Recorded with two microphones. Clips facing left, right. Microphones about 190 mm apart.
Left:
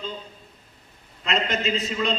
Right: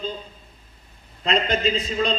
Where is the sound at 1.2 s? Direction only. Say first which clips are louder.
Right 3 dB; 30° right (ahead or behind).